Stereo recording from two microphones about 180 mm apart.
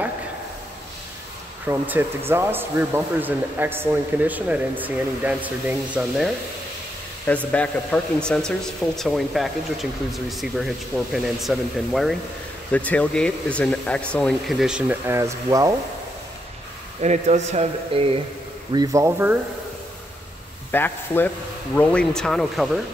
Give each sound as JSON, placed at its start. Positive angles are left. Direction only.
{"t": 1.7, "sound": "speech", "side_deg": -10}
{"t": 7.5, "sound": "speech", "side_deg": 5}
{"t": 17.0, "sound": "speech", "side_deg": -40}
{"t": 18.7, "sound": "speech", "side_deg": -20}
{"t": 20.7, "sound": "speech", "side_deg": 10}